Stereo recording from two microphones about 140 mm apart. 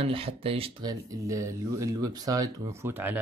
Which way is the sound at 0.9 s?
25° right (ahead or behind).